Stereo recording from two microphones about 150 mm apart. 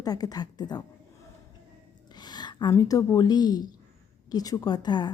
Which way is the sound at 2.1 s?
30° left (ahead or behind).